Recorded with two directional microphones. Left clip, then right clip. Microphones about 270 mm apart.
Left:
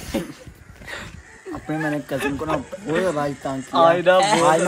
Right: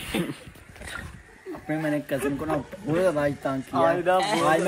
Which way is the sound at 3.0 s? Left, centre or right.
Centre.